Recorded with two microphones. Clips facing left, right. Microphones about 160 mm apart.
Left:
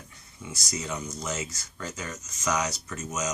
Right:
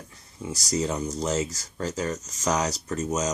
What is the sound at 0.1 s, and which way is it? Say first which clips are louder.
Speech: right 8 dB; 35° right (ahead or behind).